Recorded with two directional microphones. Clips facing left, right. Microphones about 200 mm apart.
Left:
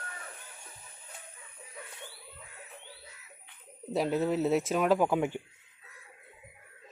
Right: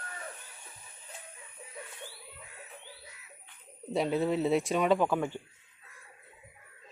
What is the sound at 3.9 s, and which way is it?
Speech, centre (ahead or behind).